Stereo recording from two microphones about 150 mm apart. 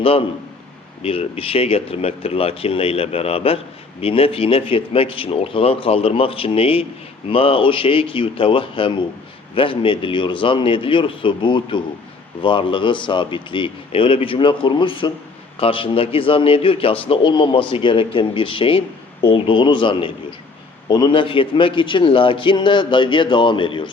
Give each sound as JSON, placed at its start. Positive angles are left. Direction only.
{"t": 0.0, "sound": "a man's voice", "side_deg": 40}